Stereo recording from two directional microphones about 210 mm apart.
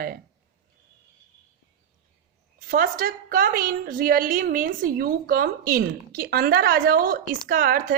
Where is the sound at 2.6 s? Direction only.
45° right (ahead or behind).